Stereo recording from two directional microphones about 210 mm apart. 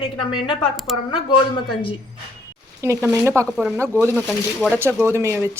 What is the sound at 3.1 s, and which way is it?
Speech, 10° right (ahead or behind).